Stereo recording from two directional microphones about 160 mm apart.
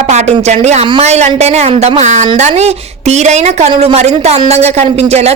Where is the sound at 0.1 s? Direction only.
45° right (ahead or behind).